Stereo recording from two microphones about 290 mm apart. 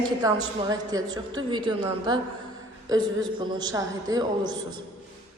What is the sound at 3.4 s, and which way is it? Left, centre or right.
A woman's voice, centre.